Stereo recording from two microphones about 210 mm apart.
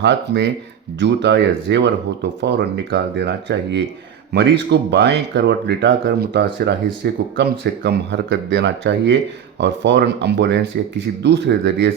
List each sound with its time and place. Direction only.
0.0 s speech: 55° right (ahead or behind)